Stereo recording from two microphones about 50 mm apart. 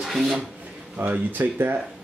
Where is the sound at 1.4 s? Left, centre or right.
Right.